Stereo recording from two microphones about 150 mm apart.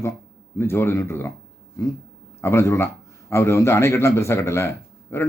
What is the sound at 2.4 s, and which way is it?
A man's voice, 20° left (ahead or behind).